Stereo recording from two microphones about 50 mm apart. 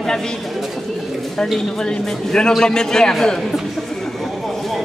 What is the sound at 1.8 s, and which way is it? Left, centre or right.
A man's voice, centre.